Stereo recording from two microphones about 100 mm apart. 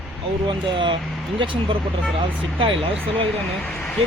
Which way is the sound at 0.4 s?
55° right (ahead or behind).